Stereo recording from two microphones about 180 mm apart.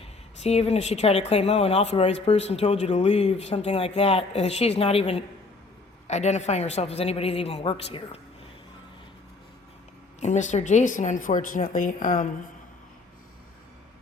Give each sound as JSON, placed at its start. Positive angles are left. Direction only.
{"t": 0.0, "sound": "a woman's voice", "side_deg": 35}
{"t": 10.2, "sound": "speech", "side_deg": 40}